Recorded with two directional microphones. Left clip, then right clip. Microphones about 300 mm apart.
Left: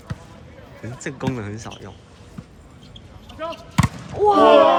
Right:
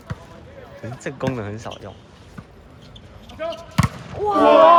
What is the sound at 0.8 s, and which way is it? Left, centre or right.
Speech, centre.